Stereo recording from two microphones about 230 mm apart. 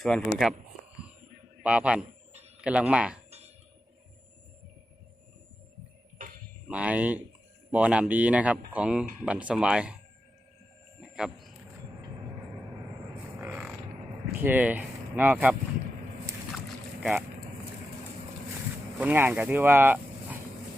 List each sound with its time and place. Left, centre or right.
0.0 s speech: centre
1.6 s speech: centre
6.1 s a sound: right
6.7 s speech: centre
11.0 s a sound: centre
13.4 s a sound: centre
14.3 s speech: centre
16.6 s boat: centre
18.9 s speech: centre